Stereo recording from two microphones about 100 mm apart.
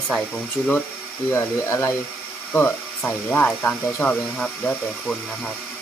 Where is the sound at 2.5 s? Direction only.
15° left (ahead or behind).